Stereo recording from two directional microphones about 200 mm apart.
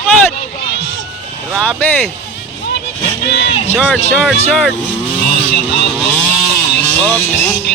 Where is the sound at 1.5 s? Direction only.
5° left (ahead or behind).